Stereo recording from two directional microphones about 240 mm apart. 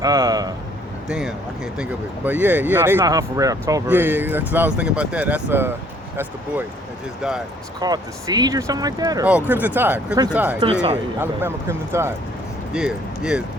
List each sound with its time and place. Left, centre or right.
0.0 s speech: centre
1.0 s speech: centre
7.2 s speech: centre
7.8 s speech: centre